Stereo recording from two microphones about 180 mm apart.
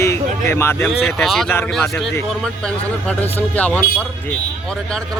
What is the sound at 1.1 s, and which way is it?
Speech, centre (ahead or behind).